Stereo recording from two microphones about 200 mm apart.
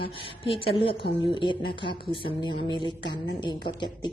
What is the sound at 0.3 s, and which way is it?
Speech, 25° left (ahead or behind).